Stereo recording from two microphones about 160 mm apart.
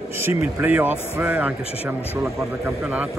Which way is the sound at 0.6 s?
10° right (ahead or behind).